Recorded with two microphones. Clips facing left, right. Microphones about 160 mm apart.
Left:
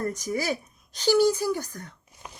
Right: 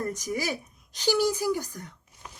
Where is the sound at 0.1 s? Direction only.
20° right (ahead or behind).